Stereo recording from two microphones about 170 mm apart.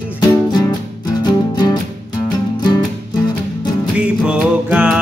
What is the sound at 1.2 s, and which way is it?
Music, 25° left (ahead or behind).